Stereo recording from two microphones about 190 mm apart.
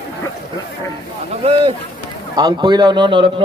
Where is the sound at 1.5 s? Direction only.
30° right (ahead or behind).